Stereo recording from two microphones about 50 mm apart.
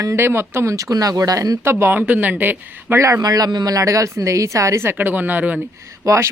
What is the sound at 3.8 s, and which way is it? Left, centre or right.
A woman's voice, right.